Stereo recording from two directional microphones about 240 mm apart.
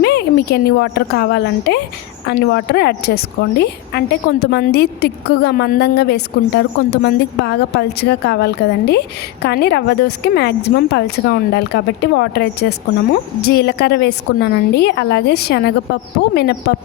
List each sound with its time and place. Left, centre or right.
0.0 s a woman's voice: left